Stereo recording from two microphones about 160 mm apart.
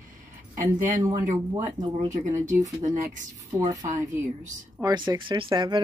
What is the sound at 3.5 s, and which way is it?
Speech, 20° right (ahead or behind).